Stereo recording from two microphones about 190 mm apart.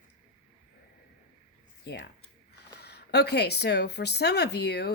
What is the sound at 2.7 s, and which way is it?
Speech, 60° left (ahead or behind).